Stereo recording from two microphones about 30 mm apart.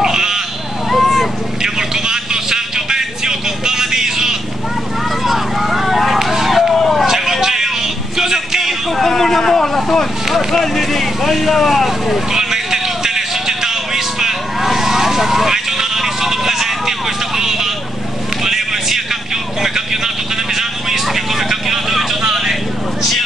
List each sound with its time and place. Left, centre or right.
0.0 s sheep: centre
0.8 s a sound: centre
1.6 s vehicle: right
5.2 s a sound: centre
6.3 s run: centre
6.7 s vehicle: centre
7.1 s music: centre
8.9 s vehicle: centre
12.3 s vehicle: centre